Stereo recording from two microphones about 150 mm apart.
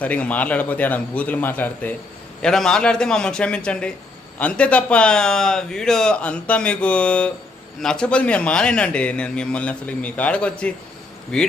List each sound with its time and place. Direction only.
0.0 s a man's voice: 10° left (ahead or behind)